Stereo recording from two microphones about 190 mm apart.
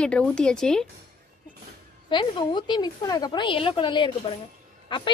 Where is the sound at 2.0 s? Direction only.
25° left (ahead or behind).